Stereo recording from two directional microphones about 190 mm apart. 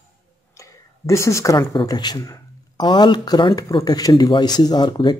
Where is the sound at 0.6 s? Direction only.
15° left (ahead or behind).